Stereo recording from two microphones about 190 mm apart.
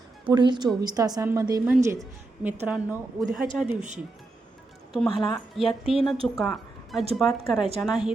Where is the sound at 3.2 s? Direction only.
45° right (ahead or behind).